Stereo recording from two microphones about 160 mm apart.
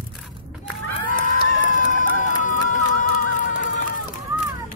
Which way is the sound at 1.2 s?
55° left (ahead or behind).